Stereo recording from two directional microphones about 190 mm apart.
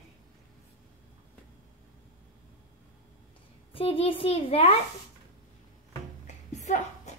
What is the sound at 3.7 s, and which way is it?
A child's voice, 30° left (ahead or behind).